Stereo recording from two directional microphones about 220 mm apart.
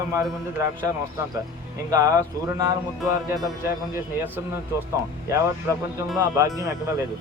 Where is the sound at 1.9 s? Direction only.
15° right (ahead or behind).